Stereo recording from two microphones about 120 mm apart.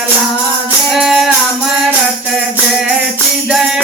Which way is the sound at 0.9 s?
5° right (ahead or behind).